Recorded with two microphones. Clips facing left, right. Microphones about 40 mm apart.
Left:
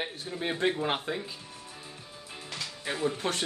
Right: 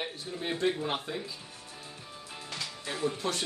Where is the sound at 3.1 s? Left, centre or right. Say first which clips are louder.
Left 1 dB; left.